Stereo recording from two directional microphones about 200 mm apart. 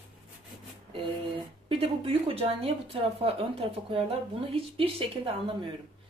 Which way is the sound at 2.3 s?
30° right (ahead or behind).